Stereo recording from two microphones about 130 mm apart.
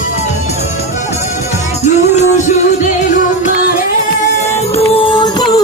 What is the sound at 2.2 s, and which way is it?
Music, 70° left (ahead or behind).